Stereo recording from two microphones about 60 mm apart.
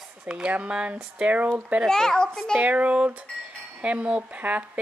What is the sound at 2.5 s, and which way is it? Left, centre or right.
Speech, right.